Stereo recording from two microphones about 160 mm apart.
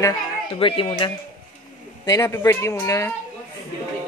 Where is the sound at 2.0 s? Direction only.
20° left (ahead or behind).